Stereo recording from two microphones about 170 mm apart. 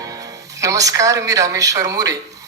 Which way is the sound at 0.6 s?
20° right (ahead or behind).